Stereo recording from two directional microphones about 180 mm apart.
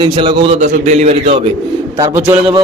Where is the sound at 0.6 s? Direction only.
40° right (ahead or behind).